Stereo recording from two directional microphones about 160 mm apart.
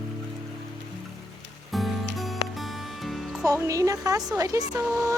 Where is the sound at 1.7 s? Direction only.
Centre (ahead or behind).